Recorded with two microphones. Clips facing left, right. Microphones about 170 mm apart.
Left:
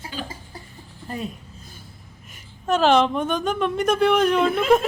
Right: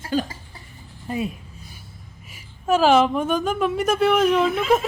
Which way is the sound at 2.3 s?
5° right (ahead or behind).